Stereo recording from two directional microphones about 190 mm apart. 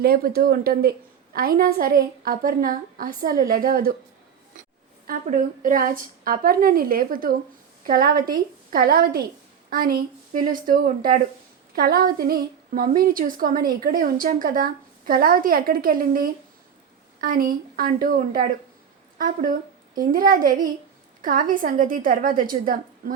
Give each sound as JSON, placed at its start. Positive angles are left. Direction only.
{"t": 0.0, "sound": "a woman's voice", "side_deg": -55}
{"t": 5.0, "sound": "a woman's voice", "side_deg": -45}
{"t": 20.1, "sound": "a woman's voice", "side_deg": -45}